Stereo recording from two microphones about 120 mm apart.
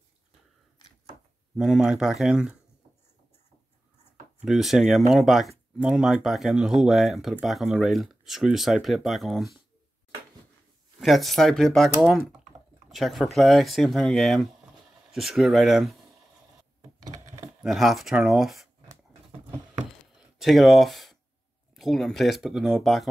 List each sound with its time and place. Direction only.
1.6 s speech: 5° right (ahead or behind)
4.5 s speech: centre (ahead or behind)
11.0 s speech: centre (ahead or behind)
17.0 s a sound: 25° right (ahead or behind)
17.6 s speech: centre (ahead or behind)
20.2 s a sound: centre (ahead or behind)
21.7 s speech: centre (ahead or behind)